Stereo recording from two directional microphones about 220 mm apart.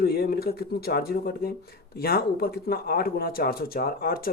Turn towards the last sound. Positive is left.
turn(degrees=45)  # may be behind; listen again after turning